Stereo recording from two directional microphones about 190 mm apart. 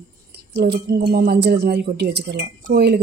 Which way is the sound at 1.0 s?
55° right (ahead or behind).